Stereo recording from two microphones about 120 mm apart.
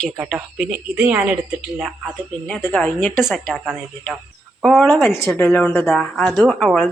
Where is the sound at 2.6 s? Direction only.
15° left (ahead or behind).